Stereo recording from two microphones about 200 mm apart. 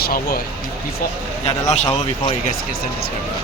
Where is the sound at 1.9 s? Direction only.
25° left (ahead or behind).